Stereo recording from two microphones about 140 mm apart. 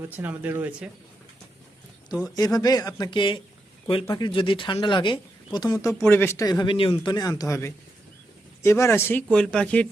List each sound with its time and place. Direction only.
0.0 s speech: 15° right (ahead or behind)
2.0 s speech: 25° left (ahead or behind); by 9.8 s 10° left (ahead or behind)